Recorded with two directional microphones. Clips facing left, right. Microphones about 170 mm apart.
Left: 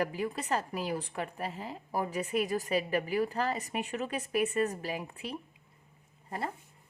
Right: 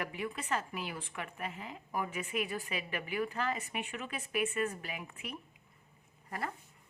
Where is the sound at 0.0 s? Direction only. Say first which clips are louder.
Left 6 dB; 35° left (ahead or behind).